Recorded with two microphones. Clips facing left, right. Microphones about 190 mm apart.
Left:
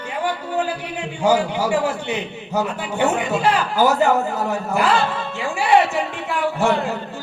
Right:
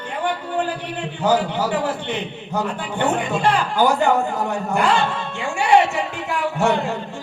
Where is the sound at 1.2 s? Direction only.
10° left (ahead or behind).